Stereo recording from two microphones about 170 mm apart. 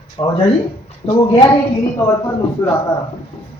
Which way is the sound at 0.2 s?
35° left (ahead or behind).